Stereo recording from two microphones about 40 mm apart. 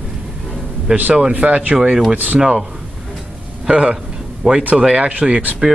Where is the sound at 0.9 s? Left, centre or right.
Right.